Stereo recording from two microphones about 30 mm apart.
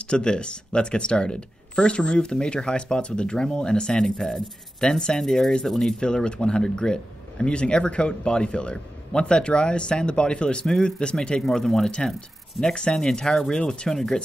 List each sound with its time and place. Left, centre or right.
0.0 s a man's voice: left
5.2 s speech: centre
5.9 s a man's voice: left
10.6 s speech: left
11.4 s speech: centre
12.5 s speech: left
13.8 s speech: centre